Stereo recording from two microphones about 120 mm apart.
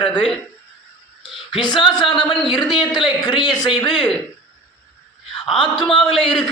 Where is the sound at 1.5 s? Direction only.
35° left (ahead or behind).